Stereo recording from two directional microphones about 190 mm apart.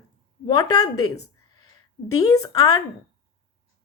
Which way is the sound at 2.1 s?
20° left (ahead or behind).